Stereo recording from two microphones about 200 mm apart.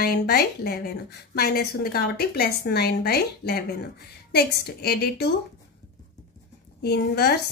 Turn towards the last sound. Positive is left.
turn(degrees=50)  # may be behind; listen again after turning